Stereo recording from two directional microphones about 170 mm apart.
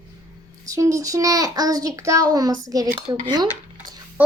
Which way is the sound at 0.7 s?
20° right (ahead or behind).